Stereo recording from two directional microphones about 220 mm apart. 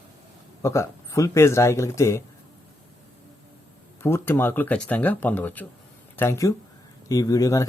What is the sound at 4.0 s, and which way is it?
Speech, 10° left (ahead or behind).